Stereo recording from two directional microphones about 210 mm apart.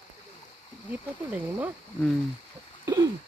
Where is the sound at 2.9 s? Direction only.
15° right (ahead or behind).